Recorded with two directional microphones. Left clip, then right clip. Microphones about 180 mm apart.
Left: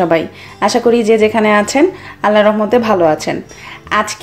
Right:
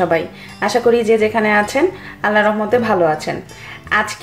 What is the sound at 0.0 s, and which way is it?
A woman's voice, 40° left (ahead or behind).